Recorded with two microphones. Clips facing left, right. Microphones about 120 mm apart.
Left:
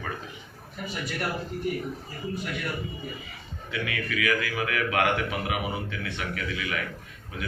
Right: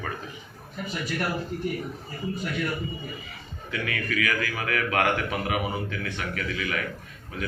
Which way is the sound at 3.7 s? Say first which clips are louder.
Right 1 dB; 15° left (ahead or behind).